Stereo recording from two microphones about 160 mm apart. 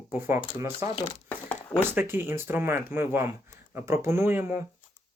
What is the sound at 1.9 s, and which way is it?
Speech, 15° right (ahead or behind).